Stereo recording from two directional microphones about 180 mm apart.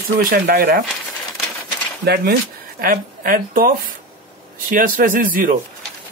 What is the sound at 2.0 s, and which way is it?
Speech, 65° right (ahead or behind).